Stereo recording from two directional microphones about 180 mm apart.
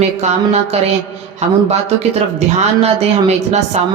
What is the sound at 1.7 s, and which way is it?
A man's voice, 35° right (ahead or behind).